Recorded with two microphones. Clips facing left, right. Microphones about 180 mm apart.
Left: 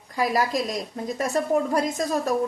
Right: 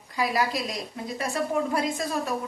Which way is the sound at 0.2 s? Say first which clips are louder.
Left 3 dB; 45° left (ahead or behind).